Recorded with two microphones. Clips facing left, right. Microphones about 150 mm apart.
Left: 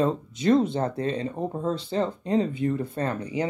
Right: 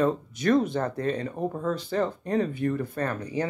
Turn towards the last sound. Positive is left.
turn(degrees=20)  # may be behind; listen again after turning